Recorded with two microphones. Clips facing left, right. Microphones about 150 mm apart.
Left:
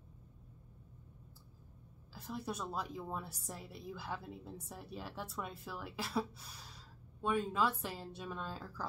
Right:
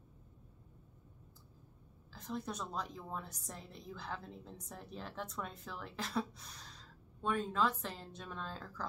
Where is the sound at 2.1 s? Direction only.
10° left (ahead or behind).